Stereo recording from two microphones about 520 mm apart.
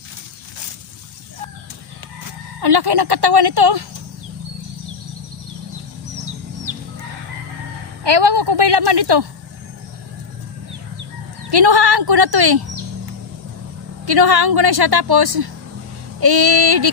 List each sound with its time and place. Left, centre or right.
2.6 s speech: right
8.0 s speech: right
11.5 s speech: right
14.0 s speech: right